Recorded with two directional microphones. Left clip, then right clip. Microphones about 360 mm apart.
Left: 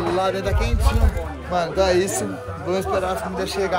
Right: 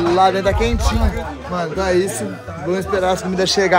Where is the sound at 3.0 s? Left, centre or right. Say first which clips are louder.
Right 7 dB; centre.